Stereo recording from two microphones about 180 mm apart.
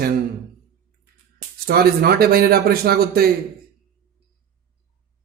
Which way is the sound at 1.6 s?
60° right (ahead or behind).